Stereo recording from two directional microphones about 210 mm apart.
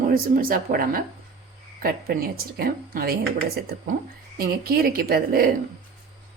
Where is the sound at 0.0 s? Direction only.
40° right (ahead or behind).